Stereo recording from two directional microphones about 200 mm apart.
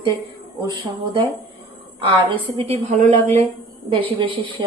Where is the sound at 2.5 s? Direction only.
30° right (ahead or behind).